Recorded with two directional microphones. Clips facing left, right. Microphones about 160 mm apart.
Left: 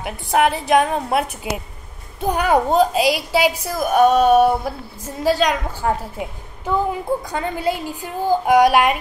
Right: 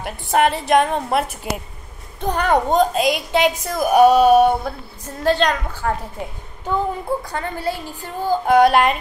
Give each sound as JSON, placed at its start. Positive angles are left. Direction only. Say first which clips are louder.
{"t": 0.0, "sound": "a woman's voice", "louder": "even", "side_deg": 0}
{"t": 4.6, "sound": "speech", "louder": "left 1 dB", "side_deg": 10}